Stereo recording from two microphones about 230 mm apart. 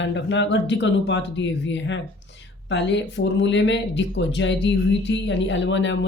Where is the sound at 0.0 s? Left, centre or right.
Left.